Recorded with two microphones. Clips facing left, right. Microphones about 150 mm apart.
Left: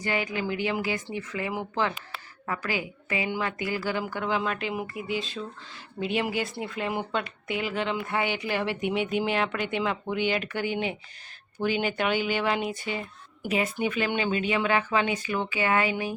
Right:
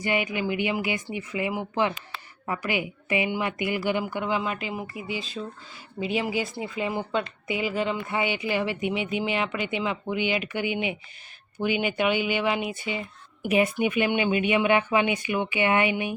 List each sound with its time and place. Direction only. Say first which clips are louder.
0.0 s speech: right 2 dB; 15° right (ahead or behind)
4.0 s a woman's voice: right 1 dB; 5° right (ahead or behind)
9.0 s speech: left 2 dB; 50° left (ahead or behind)
9.2 s a woman's voice: even; 5° right (ahead or behind)
13.5 s speech: right 4 dB; 20° right (ahead or behind)